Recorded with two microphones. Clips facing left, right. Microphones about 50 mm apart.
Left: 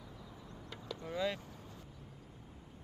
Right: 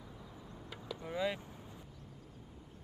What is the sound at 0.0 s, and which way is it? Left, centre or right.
Vehicle, centre.